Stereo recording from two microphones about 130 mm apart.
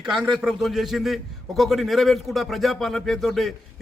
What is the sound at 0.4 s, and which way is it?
A man's voice, centre (ahead or behind).